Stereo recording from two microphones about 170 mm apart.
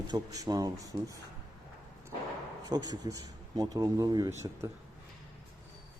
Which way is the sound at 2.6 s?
25° right (ahead or behind).